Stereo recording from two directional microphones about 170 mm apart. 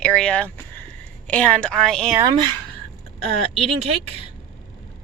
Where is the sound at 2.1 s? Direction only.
25° right (ahead or behind).